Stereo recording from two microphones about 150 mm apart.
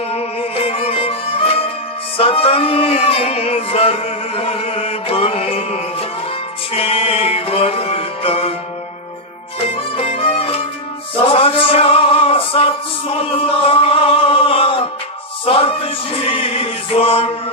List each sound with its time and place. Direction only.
0.1 s music: 40° left (ahead or behind)
10.0 s music: 40° left (ahead or behind)